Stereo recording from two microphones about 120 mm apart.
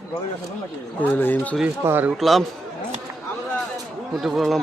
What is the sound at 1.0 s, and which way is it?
Speech, 15° left (ahead or behind).